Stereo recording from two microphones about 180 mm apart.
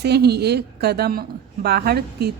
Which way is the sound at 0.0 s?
65° right (ahead or behind).